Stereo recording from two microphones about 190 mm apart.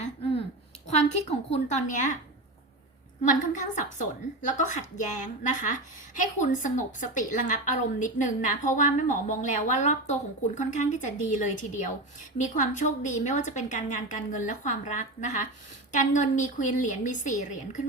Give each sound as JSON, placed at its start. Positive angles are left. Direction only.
{"t": 0.9, "sound": "a woman's voice", "side_deg": 35}
{"t": 3.2, "sound": "a woman's voice", "side_deg": 40}